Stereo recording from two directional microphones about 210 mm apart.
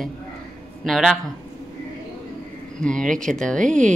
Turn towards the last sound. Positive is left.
turn(degrees=-40)  # may be behind; listen again after turning